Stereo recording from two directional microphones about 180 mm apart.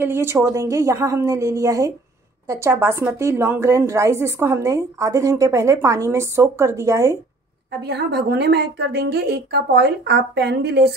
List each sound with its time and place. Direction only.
0.0 s a woman's voice: 15° right (ahead or behind)
7.8 s a woman's voice: 65° right (ahead or behind)